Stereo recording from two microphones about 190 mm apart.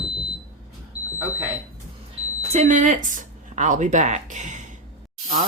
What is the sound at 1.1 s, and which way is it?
Smoke detector, 10° right (ahead or behind).